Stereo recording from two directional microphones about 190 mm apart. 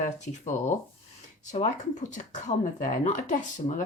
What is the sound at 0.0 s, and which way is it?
Speech, 40° left (ahead or behind).